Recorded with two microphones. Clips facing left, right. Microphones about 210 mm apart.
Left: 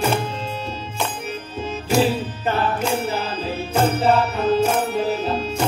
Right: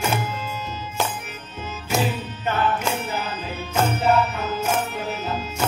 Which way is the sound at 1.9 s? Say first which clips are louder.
Left 6 dB; 35° left (ahead or behind).